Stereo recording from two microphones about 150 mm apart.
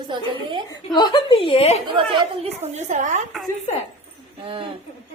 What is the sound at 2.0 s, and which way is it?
A woman's voice, 45° right (ahead or behind).